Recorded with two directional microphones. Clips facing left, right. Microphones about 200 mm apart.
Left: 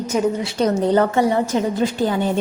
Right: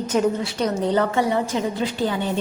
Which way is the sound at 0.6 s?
45° left (ahead or behind).